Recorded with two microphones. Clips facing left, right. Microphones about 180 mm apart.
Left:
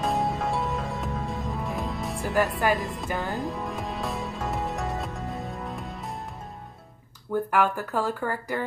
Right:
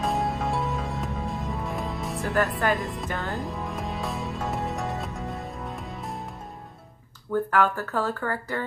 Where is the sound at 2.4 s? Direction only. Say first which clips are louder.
Left 1 dB; centre (ahead or behind).